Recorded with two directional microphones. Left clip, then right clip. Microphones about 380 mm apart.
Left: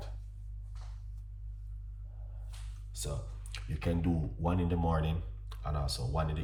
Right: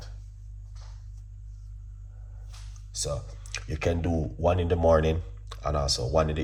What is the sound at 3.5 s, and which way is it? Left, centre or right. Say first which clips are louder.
Speech: right 9 dB; centre.